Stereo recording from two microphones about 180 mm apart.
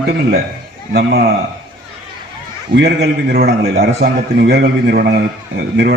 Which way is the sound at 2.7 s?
65° right (ahead or behind).